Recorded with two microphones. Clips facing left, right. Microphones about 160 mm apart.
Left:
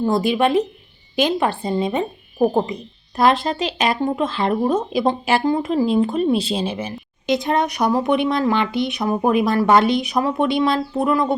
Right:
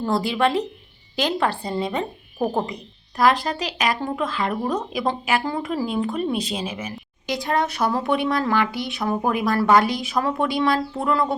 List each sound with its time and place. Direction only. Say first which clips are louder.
0.0 s speech: left 3 dB; 20° left (ahead or behind)